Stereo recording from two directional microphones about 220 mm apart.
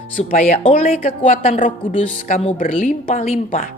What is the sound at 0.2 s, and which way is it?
Speech, 35° left (ahead or behind).